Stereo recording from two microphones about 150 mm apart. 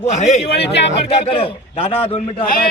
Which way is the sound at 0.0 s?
50° left (ahead or behind).